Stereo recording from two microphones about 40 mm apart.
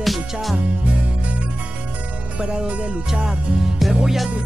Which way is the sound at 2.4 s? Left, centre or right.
Centre.